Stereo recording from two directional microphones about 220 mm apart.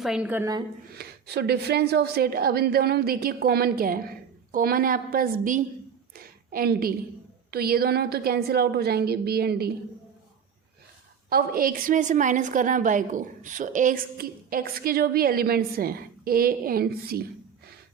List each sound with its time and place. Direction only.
0.0 s a woman's voice: 5° right (ahead or behind)
0.9 s a woman's voice: 50° right (ahead or behind)
6.1 s a sound: 40° right (ahead or behind)
7.5 s a woman's voice: 45° right (ahead or behind)
11.3 s a woman's voice: 40° right (ahead or behind)